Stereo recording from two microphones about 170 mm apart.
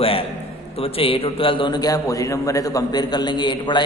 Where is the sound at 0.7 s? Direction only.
35° left (ahead or behind).